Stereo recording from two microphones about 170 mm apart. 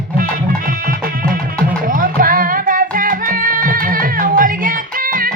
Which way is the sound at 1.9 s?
55° right (ahead or behind).